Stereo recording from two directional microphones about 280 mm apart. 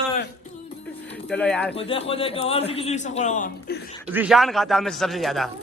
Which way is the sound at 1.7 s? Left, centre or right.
Left.